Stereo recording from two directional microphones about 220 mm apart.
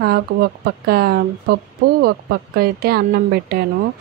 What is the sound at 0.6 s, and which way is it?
Speech, 45° right (ahead or behind).